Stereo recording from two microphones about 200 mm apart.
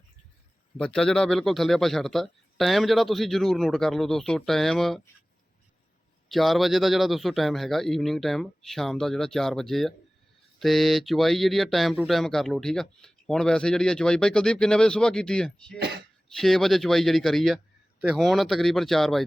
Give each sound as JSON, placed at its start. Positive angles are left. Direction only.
{"t": 0.9, "sound": "speech", "side_deg": 5}
{"t": 6.2, "sound": "speech", "side_deg": 0}
{"t": 15.8, "sound": "a sound", "side_deg": -55}
{"t": 16.4, "sound": "speech", "side_deg": 0}